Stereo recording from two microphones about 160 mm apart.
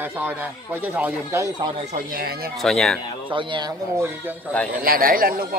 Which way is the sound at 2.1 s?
70° right (ahead or behind).